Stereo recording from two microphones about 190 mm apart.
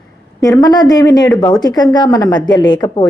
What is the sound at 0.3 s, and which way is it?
Speech, 20° left (ahead or behind).